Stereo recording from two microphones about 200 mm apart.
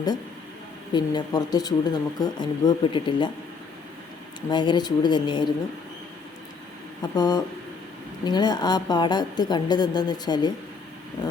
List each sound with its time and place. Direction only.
0.9 s speech: 20° left (ahead or behind)
4.4 s speech: 20° left (ahead or behind)
7.2 s speech: 20° left (ahead or behind)